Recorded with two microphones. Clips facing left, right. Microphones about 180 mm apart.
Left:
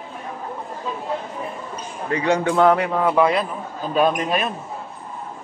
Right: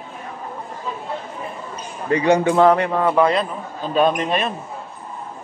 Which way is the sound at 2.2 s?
10° right (ahead or behind).